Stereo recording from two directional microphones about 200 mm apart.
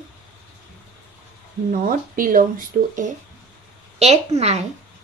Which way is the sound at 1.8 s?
45° right (ahead or behind).